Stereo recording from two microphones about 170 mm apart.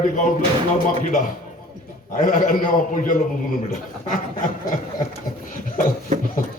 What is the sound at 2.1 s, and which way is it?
A man's voice, 55° left (ahead or behind).